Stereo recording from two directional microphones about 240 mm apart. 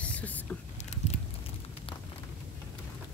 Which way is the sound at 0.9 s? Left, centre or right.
Left.